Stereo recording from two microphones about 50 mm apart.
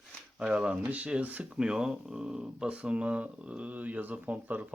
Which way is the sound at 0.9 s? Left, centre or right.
Right.